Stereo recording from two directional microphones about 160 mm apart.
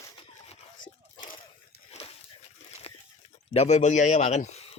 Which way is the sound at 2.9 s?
40° left (ahead or behind).